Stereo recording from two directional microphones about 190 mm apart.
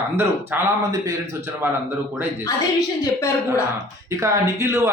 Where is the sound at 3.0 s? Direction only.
15° left (ahead or behind).